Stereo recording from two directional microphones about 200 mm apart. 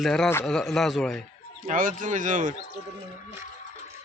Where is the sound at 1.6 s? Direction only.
40° right (ahead or behind).